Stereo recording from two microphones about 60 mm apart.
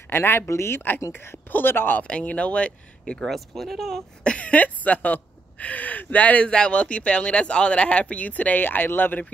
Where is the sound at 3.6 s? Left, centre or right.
Centre.